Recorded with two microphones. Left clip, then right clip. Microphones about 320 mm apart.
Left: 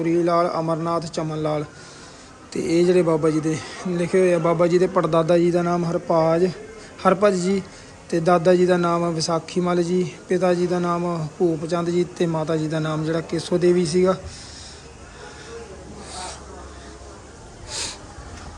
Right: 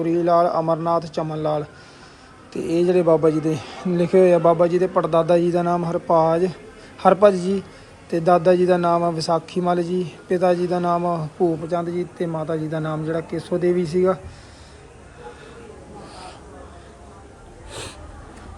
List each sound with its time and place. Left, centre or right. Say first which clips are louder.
0.0 s a man's voice: right 2 dB; centre
2.6 s a man's voice: right 1 dB; centre